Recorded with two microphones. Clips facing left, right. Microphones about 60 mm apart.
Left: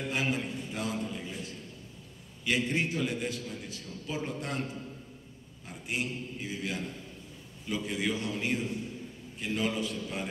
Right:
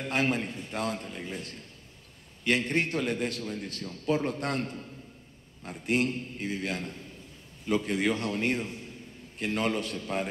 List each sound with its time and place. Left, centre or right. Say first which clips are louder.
0.1 s a man's voice: right 5 dB; right
2.4 s a man's voice: right 3 dB; right